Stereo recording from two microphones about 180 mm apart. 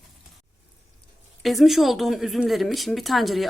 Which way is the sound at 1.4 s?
Centre (ahead or behind).